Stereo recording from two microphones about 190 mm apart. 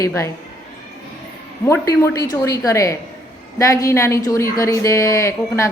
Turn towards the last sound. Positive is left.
turn(degrees=15)  # may be behind; listen again after turning